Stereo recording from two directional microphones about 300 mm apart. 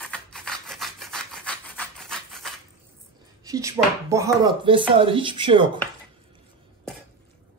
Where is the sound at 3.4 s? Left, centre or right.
Centre.